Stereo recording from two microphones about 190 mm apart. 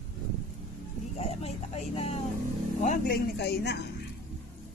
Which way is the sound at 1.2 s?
35° left (ahead or behind).